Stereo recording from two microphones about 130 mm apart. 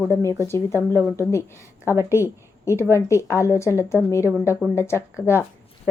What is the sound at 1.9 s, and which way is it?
Speech, 15° right (ahead or behind).